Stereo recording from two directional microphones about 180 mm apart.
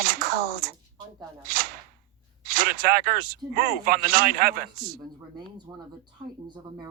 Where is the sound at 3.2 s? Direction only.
55° right (ahead or behind).